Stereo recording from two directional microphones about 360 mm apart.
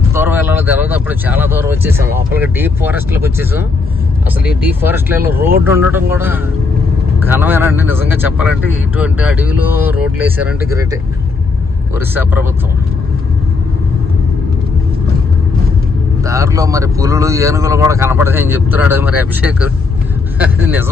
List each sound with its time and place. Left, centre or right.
0.1 s speech: centre
16.2 s speech: centre